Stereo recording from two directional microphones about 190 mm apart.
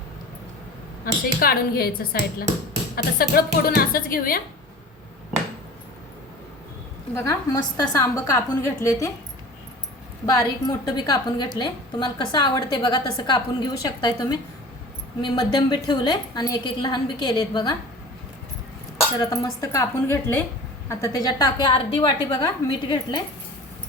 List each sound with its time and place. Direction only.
1.0 s speech: 50° left (ahead or behind)
7.2 s a woman's voice: 15° left (ahead or behind)
10.2 s a woman's voice: 20° left (ahead or behind)
15.5 s a woman's voice: 20° left (ahead or behind)
19.2 s a woman's voice: 15° left (ahead or behind)